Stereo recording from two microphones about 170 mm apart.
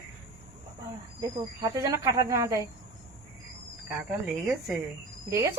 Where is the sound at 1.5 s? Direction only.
20° right (ahead or behind).